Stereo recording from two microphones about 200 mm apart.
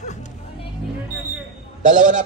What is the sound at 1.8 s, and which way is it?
Speech, 40° right (ahead or behind).